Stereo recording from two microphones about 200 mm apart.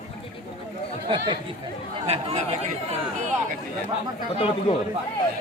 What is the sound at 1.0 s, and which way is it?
Speech, 25° right (ahead or behind).